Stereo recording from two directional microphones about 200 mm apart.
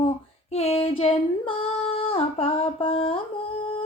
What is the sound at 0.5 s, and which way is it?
Female singing, 30° left (ahead or behind).